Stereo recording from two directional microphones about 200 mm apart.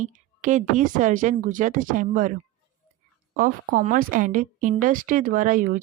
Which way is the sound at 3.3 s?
45° right (ahead or behind).